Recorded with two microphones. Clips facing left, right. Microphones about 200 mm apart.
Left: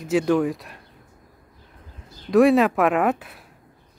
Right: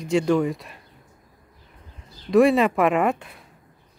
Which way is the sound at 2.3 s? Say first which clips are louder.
Left 1 dB; centre (ahead or behind).